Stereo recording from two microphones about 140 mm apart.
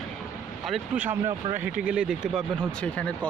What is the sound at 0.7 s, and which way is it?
Speech, 10° right (ahead or behind).